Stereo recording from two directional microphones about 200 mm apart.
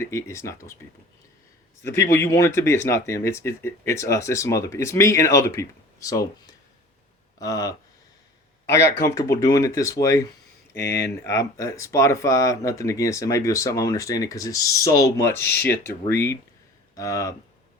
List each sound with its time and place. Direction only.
0.0 s speech: 15° left (ahead or behind)
1.8 s speech: 15° left (ahead or behind)
7.3 s speech: 15° left (ahead or behind)